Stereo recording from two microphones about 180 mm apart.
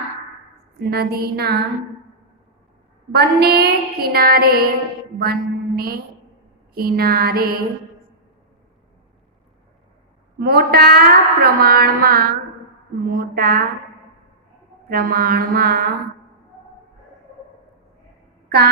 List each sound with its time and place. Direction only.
0.8 s a woman's voice: 60° right (ahead or behind)
3.1 s a woman's voice: 60° right (ahead or behind)
10.4 s a woman's voice: 60° right (ahead or behind)
14.8 s a woman's voice: 55° right (ahead or behind)
18.4 s a sound: 65° right (ahead or behind)